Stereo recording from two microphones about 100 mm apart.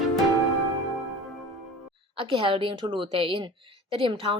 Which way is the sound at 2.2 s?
60° right (ahead or behind).